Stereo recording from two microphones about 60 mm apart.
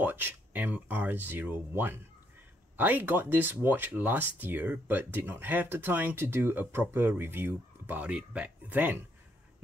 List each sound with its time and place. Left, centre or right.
0.0 s speech: right
8.0 s speech: right